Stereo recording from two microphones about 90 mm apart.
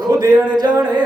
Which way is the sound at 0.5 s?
50° right (ahead or behind).